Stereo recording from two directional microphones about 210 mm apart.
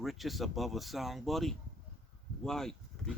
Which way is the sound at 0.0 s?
Centre (ahead or behind).